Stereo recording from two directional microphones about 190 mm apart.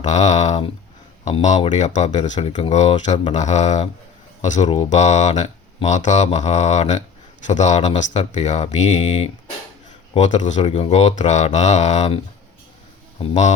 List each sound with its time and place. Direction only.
0.0 s speech: 35° left (ahead or behind)